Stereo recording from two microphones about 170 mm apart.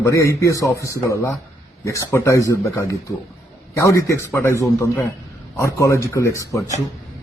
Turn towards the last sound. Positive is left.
turn(degrees=15)  # may be behind; listen again after turning